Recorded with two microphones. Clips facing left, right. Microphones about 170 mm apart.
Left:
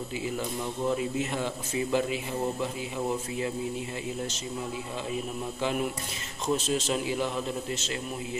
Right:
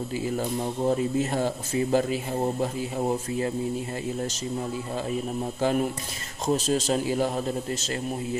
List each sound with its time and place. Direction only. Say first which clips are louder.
0.4 s speech: right 5 dB; 40° right (ahead or behind)
5.6 s speech: right 5 dB; 40° right (ahead or behind)